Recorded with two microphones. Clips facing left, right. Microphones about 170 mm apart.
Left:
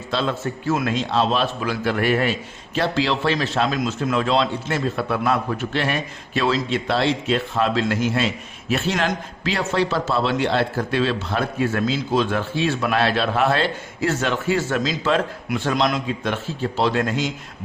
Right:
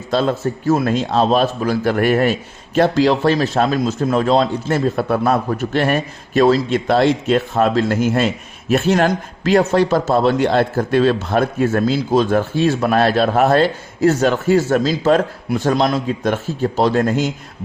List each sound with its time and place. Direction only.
0.1 s a man's voice: 45° right (ahead or behind)